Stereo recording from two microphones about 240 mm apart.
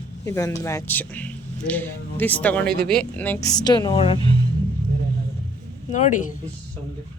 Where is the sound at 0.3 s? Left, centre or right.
Centre.